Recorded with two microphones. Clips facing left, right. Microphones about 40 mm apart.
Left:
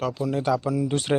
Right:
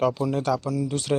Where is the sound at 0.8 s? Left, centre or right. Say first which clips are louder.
Left 2 dB; left.